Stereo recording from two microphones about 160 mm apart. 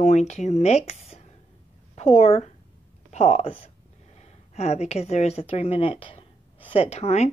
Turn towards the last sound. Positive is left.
turn(degrees=40)  # may be behind; listen again after turning